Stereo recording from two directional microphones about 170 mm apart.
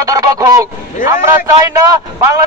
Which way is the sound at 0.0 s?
20° right (ahead or behind).